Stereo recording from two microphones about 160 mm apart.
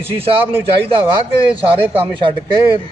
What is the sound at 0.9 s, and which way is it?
A man's voice, 35° right (ahead or behind).